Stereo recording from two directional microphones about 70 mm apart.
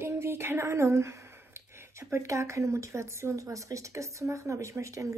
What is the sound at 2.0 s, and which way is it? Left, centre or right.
Speech, right.